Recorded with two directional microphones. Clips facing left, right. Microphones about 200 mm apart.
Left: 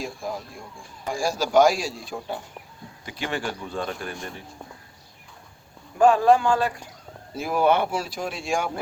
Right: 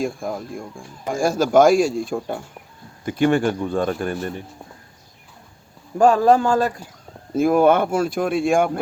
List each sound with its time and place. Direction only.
0.0 s speech: 50° right (ahead or behind)
6.0 s speech: 40° right (ahead or behind)